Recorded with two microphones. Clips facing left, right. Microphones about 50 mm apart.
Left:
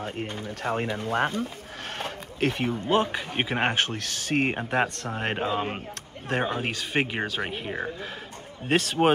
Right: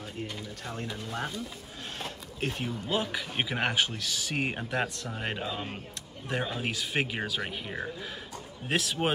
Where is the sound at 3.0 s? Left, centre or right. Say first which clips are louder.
Left 3 dB; left.